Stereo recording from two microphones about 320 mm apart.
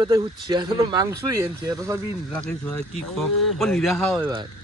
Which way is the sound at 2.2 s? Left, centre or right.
Centre.